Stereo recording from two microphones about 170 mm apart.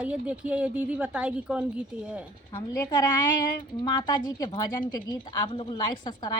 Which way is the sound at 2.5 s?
20° left (ahead or behind).